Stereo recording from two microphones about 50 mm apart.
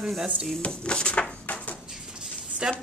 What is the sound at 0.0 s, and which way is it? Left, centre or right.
Speech, centre.